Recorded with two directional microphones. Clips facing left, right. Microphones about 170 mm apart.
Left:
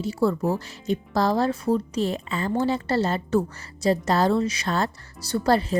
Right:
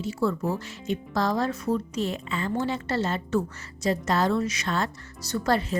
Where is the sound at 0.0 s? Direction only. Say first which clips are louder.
Left 3 dB; 35° left (ahead or behind).